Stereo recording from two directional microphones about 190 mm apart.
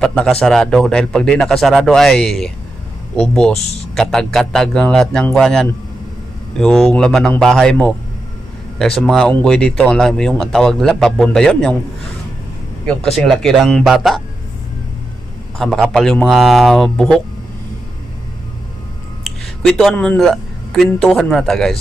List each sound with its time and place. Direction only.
0.0 s a man's voice: 5° left (ahead or behind)
3.5 s speech: 35° left (ahead or behind)
3.9 s a man's voice: 5° left (ahead or behind)
12.8 s a man's voice: 5° left (ahead or behind)
15.5 s a man's voice: centre (ahead or behind)
19.2 s speech: 5° left (ahead or behind)